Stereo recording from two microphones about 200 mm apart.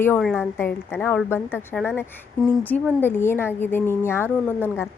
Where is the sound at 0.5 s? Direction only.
10° left (ahead or behind).